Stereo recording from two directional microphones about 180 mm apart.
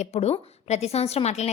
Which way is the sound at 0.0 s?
35° left (ahead or behind).